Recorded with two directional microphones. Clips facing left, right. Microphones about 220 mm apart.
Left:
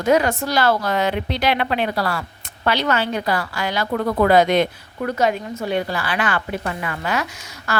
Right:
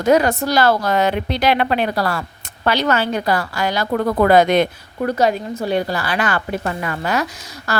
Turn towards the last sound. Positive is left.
turn(degrees=-40)  # may be behind; listen again after turning